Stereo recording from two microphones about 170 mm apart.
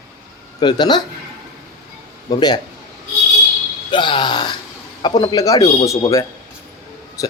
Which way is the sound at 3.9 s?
30° left (ahead or behind).